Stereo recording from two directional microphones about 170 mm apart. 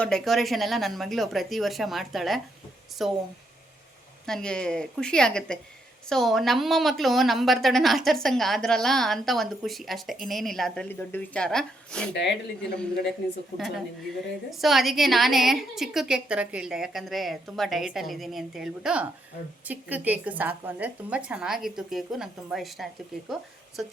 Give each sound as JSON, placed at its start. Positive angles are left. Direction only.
{"t": 0.0, "sound": "a woman's voice", "side_deg": 0}
{"t": 4.3, "sound": "a woman's voice", "side_deg": 5}
{"t": 12.1, "sound": "speech", "side_deg": 90}
{"t": 13.6, "sound": "a woman's voice", "side_deg": 0}